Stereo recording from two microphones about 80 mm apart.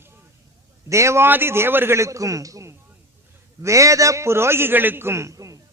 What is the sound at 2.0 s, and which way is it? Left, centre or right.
A man's voice, right.